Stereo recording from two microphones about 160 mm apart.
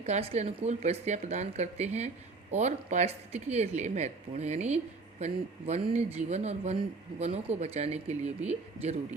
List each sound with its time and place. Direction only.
0.0 s speech: 40° right (ahead or behind)